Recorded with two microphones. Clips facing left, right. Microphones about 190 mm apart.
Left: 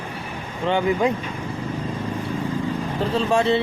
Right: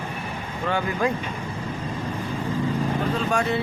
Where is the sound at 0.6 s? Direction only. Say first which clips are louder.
Left 5 dB; 20° left (ahead or behind).